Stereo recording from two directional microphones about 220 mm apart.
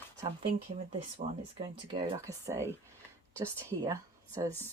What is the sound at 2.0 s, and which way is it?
Speech, 15° right (ahead or behind).